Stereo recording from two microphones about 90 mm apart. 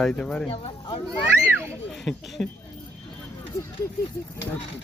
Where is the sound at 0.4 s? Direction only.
90° left.